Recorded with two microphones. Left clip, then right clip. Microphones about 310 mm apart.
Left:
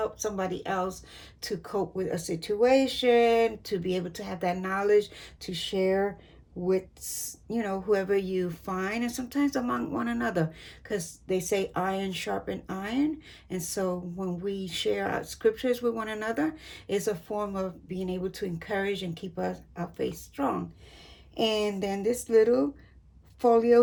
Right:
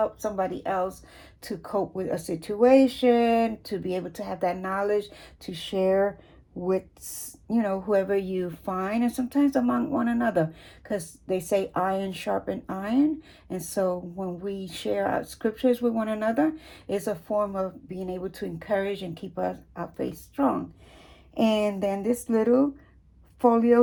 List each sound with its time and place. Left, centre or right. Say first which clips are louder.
0.0 s speech: right 4 dB; centre